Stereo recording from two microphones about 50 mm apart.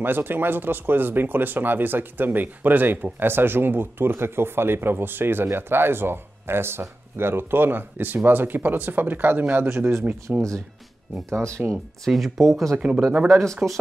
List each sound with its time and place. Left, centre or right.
0.0 s speech: right
11.2 s speech: right
12.1 s speech: centre
12.7 s speech: right